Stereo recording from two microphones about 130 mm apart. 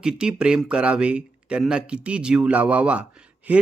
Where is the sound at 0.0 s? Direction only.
5° right (ahead or behind).